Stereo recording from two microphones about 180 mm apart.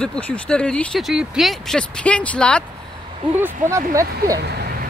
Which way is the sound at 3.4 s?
15° right (ahead or behind).